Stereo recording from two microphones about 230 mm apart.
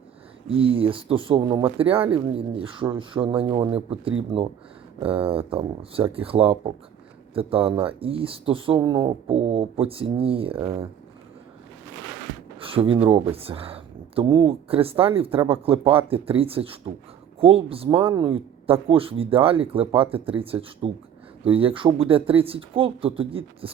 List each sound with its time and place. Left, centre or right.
0.4 s speech: right
12.5 s speech: right